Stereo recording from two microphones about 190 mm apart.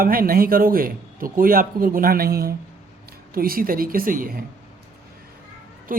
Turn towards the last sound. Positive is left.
turn(degrees=-45)  # may be behind; listen again after turning